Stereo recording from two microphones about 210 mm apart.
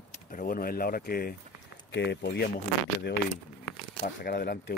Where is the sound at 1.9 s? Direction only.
55° left (ahead or behind).